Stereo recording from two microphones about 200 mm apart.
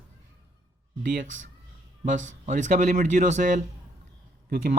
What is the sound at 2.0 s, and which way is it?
Speech, 40° right (ahead or behind).